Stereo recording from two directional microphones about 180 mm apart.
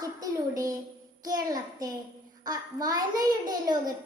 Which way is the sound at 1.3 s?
20° right (ahead or behind).